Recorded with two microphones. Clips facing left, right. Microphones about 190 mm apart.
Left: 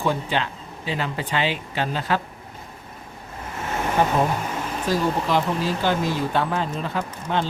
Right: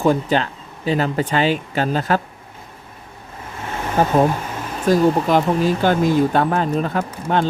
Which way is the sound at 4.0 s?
40° right (ahead or behind).